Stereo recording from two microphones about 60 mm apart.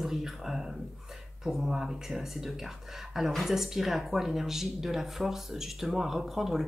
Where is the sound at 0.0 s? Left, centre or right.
Centre.